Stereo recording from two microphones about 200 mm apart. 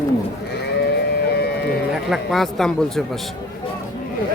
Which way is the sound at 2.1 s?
Centre (ahead or behind).